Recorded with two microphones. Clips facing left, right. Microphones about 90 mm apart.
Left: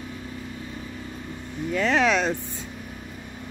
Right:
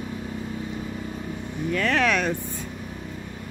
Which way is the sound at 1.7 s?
15° left (ahead or behind).